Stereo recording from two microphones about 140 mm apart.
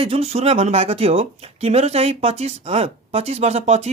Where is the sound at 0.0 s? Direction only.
45° right (ahead or behind).